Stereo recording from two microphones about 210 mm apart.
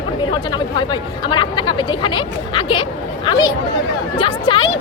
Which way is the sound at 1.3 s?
20° left (ahead or behind).